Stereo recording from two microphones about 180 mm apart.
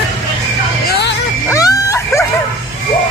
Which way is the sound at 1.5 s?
20° left (ahead or behind).